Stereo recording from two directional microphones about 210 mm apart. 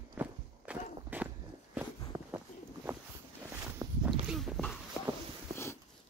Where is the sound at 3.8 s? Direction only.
15° right (ahead or behind).